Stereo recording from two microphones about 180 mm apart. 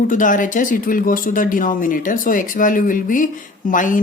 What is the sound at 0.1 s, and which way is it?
Speech, 45° left (ahead or behind).